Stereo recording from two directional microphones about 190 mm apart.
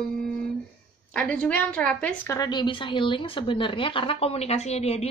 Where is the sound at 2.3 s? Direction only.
20° left (ahead or behind).